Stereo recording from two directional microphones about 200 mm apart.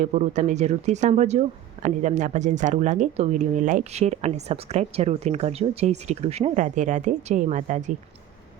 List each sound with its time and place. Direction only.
0.0 s speech: 35° right (ahead or behind)